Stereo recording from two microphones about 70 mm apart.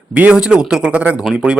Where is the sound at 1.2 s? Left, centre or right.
Centre.